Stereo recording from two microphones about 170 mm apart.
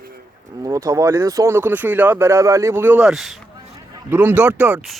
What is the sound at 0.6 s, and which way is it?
Speech, 20° right (ahead or behind).